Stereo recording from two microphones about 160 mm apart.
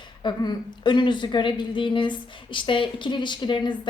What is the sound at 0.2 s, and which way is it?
A woman's voice, 30° left (ahead or behind).